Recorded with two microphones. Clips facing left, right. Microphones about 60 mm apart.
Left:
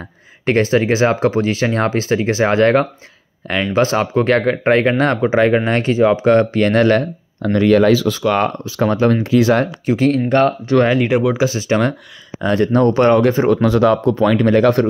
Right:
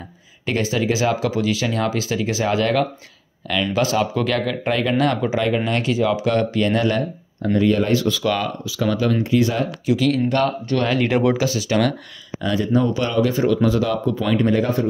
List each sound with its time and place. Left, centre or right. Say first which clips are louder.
0.5 s speech: left 7 dB; left
8.4 s speech: left 7 dB; left
9.2 s speech: left 5 dB; left
9.8 s speech: left 2 dB; left
10.9 s speech: left 4 dB; centre
11.3 s speech: left 3 dB; left
12.5 s speech: left 6 dB; left
13.3 s speech: left 5 dB; left
13.6 s speech: left 6 dB; left